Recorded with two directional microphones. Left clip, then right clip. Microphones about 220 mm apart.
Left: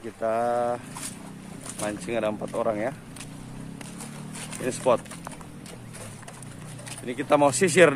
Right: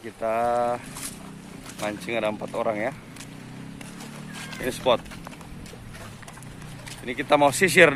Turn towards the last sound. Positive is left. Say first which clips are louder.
# right 2 dB
turn(degrees=5)  # may be behind; listen again after turning